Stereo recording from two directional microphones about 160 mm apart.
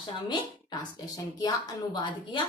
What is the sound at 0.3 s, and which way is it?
A woman's voice, 25° left (ahead or behind).